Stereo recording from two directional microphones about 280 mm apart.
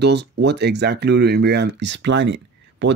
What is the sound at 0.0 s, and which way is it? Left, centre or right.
Speech, right.